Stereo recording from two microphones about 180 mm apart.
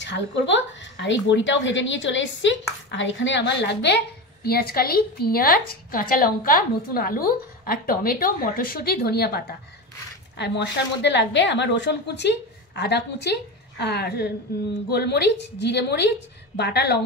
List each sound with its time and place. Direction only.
0.0 s a woman's voice: 85° left; by 17.0 s 65° left (ahead or behind)